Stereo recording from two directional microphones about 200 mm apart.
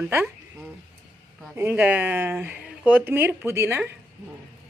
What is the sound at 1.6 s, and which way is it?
Speech, 10° right (ahead or behind).